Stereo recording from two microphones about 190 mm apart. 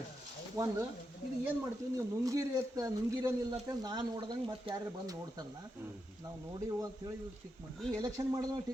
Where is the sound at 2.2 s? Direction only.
20° right (ahead or behind).